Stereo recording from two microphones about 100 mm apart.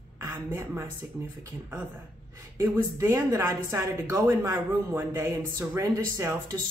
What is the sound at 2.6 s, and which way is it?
A woman's voice, 25° right (ahead or behind).